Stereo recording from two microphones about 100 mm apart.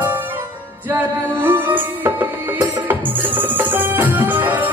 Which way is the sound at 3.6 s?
20° right (ahead or behind).